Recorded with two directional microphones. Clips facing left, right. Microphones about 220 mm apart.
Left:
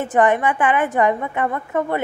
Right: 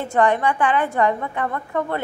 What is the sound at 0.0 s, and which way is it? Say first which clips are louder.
A woman's voice: left 2 dB; 20° left (ahead or behind).